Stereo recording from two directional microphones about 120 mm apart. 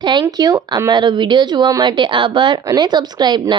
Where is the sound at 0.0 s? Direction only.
40° right (ahead or behind).